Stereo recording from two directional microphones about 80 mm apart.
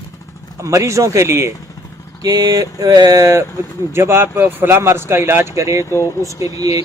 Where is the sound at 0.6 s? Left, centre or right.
Right.